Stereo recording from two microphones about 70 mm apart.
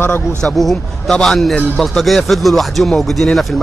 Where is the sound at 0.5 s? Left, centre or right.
Centre.